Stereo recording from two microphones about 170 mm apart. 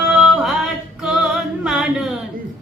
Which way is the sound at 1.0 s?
5° right (ahead or behind).